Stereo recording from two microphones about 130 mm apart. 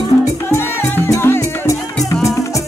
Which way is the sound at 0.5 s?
20° left (ahead or behind).